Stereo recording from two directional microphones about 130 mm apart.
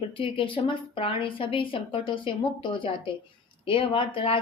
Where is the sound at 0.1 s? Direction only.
40° left (ahead or behind).